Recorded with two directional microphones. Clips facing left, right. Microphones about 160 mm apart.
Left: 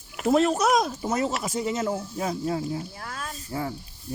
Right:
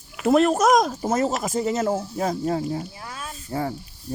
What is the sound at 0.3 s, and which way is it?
Speech, 60° right (ahead or behind).